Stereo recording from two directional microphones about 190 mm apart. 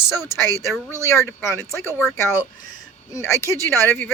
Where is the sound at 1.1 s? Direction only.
15° left (ahead or behind).